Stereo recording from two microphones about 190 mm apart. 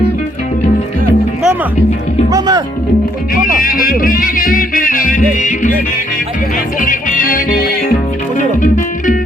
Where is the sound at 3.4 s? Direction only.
45° left (ahead or behind).